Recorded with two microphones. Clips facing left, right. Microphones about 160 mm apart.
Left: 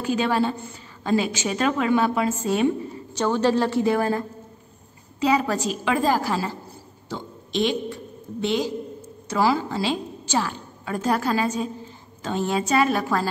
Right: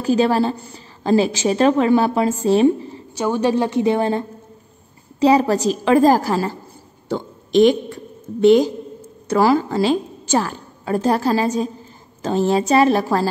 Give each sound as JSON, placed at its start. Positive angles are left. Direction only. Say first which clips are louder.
{"t": 0.0, "sound": "a woman's voice", "louder": "right 6 dB", "side_deg": -35}
{"t": 3.2, "sound": "a woman's voice", "louder": "right 2 dB", "side_deg": -15}
{"t": 5.2, "sound": "a woman's voice", "louder": "right 7 dB", "side_deg": -35}
{"t": 7.1, "sound": "a sound", "louder": "right 9 dB", "side_deg": -50}
{"t": 9.3, "sound": "a woman's voice", "louder": "right 6 dB", "side_deg": -50}
{"t": 10.9, "sound": "a woman's voice", "louder": "right 5 dB", "side_deg": -35}